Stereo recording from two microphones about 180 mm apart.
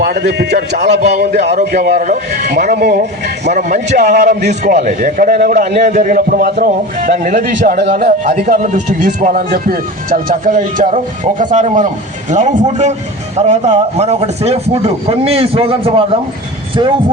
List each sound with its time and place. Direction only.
0.0 s a man's voice: 65° right (ahead or behind)
1.9 s a man's voice: 45° right (ahead or behind)
2.6 s speech: 55° right (ahead or behind)
3.6 s a man's voice: 45° right (ahead or behind)